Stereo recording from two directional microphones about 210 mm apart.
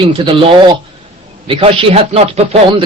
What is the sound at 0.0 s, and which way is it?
A man's voice, 25° right (ahead or behind).